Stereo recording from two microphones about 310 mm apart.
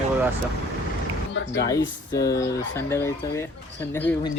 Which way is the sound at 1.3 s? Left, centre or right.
Left.